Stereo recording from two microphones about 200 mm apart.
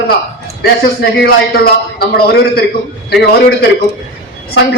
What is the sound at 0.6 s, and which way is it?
A man's voice, 50° left (ahead or behind).